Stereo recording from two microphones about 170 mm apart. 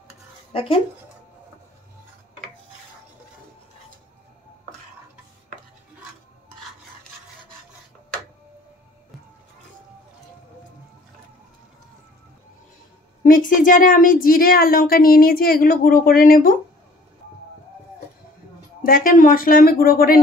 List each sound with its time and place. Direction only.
0.5 s speech: 35° left (ahead or behind)
13.2 s speech: 55° left (ahead or behind)
18.8 s speech: 55° left (ahead or behind)